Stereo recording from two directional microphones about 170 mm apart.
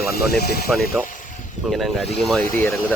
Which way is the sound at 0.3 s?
70° left (ahead or behind).